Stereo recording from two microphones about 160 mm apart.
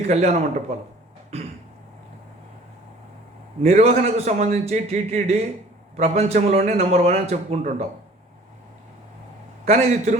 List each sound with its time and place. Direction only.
0.1 s a man's voice: 45° right (ahead or behind)
3.6 s a man's voice: 45° right (ahead or behind)
9.6 s a man's voice: 45° right (ahead or behind)